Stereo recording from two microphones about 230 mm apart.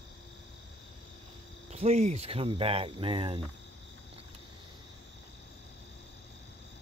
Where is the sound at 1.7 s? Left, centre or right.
Right.